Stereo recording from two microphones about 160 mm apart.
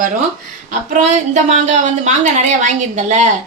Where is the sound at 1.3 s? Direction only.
45° right (ahead or behind).